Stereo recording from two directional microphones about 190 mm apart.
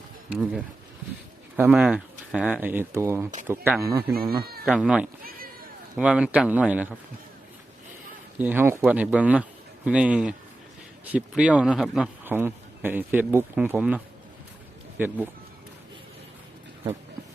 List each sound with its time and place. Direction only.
0.3 s speech: 5° right (ahead or behind)
4.1 s speech: 50° right (ahead or behind)
4.6 s speech: 5° right (ahead or behind)
8.4 s speech: 10° right (ahead or behind)